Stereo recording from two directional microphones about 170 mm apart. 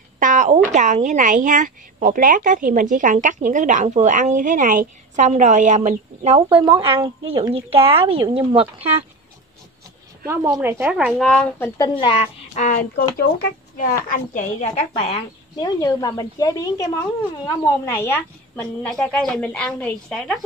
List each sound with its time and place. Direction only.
0.2 s a woman's voice: 45° right (ahead or behind)
10.2 s speech: 15° right (ahead or behind)
11.2 s a woman's voice: 5° left (ahead or behind)
12.0 s a woman's voice: 30° left (ahead or behind)
12.5 s a woman's voice: 50° left (ahead or behind)
14.0 s a woman's voice: 50° left (ahead or behind)
15.6 s a woman's voice: 25° left (ahead or behind); by 20.3 s 5° left (ahead or behind)